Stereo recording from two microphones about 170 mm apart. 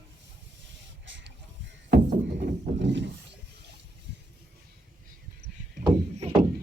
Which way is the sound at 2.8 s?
90° right.